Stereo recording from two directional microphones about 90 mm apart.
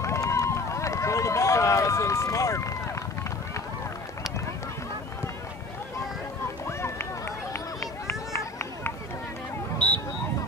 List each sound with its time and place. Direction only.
0.0 s run: 35° left (ahead or behind)
6.4 s run: 30° left (ahead or behind)